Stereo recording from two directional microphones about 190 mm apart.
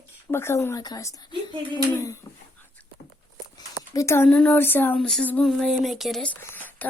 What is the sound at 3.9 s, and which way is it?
Speech, 15° left (ahead or behind).